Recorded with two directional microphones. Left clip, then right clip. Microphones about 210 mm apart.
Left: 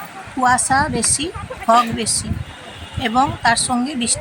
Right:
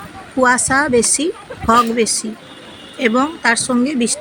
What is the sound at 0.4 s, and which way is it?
Speech, 10° right (ahead or behind).